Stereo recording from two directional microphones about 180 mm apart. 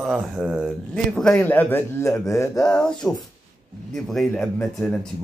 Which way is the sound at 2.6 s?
5° left (ahead or behind).